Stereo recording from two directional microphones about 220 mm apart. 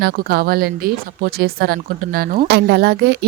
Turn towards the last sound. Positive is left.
turn(degrees=-50)  # may be behind; listen again after turning